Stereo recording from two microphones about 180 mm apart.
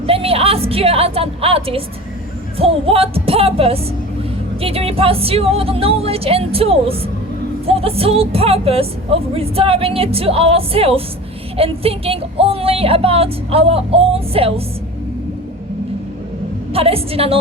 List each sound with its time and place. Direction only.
0.0 s a sound: 30° right (ahead or behind)
2.6 s a woman's voice: 30° right (ahead or behind)
16.7 s a woman's voice: 30° right (ahead or behind)